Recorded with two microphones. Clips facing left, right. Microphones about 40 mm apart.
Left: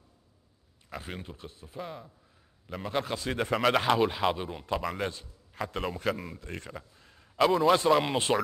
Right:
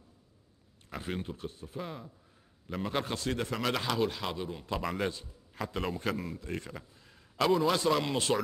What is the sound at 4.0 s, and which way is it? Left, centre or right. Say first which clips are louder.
Speech: left 5 dB; left.